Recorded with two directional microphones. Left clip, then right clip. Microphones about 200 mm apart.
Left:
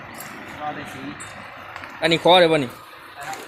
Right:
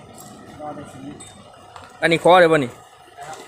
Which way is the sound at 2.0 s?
15° right (ahead or behind).